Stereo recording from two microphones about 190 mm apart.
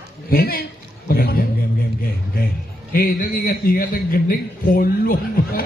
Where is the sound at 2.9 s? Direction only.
50° left (ahead or behind).